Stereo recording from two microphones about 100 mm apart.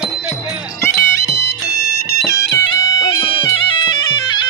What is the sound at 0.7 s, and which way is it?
Music, 30° left (ahead or behind).